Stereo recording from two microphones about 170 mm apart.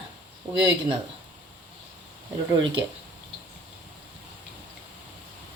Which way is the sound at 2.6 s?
90° right.